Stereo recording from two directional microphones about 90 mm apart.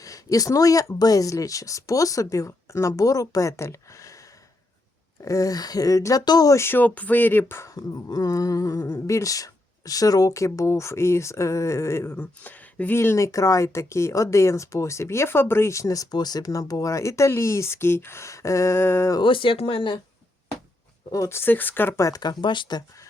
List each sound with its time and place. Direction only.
0.0 s speech: 40° left (ahead or behind)
5.2 s speech: 40° left (ahead or behind)
6.6 s speech: 25° left (ahead or behind)
7.7 s speech: 50° left (ahead or behind); by 19.1 s 25° left (ahead or behind)
19.2 s speech: 70° left (ahead or behind)
21.1 s speech: 30° left (ahead or behind)
21.9 s speech: 35° left (ahead or behind)
22.2 s speech: 55° left (ahead or behind)